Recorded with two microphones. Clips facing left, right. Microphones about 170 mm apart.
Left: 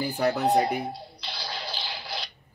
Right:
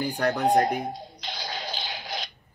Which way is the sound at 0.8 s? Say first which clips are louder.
Right 1 dB; 15° right (ahead or behind).